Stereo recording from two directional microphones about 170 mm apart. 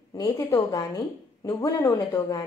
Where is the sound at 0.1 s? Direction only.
20° left (ahead or behind).